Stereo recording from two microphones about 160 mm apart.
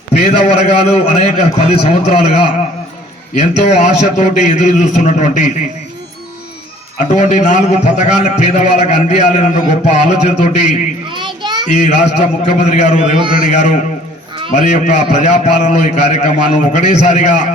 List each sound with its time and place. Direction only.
0.1 s a man's voice: 45° left (ahead or behind)
7.1 s a man's voice: 50° left (ahead or behind)
11.1 s a sound: 30° right (ahead or behind)
11.7 s a man's voice: 45° left (ahead or behind)
13.1 s a man's voice: 30° right (ahead or behind)
13.5 s a man's voice: 50° left (ahead or behind)